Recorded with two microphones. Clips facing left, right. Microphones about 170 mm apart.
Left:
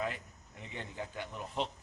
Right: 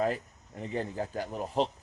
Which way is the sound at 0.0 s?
40° right (ahead or behind).